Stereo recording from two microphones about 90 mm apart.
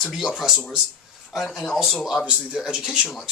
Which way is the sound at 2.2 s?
10° right (ahead or behind).